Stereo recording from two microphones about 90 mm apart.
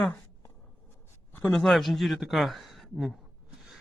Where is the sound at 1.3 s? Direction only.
20° left (ahead or behind).